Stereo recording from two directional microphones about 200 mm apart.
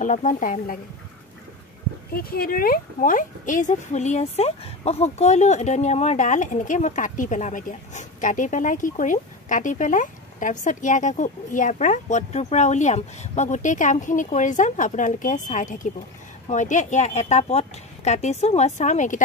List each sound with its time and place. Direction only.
0.0 s speech: 40° left (ahead or behind)
2.1 s speech: 45° left (ahead or behind)